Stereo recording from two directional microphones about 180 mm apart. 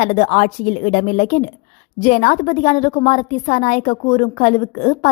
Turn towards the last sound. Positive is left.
turn(degrees=35)  # may be behind; listen again after turning